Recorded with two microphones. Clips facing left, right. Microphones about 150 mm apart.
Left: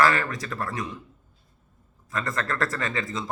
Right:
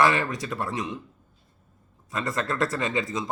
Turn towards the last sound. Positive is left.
turn(degrees=-20)  # may be behind; listen again after turning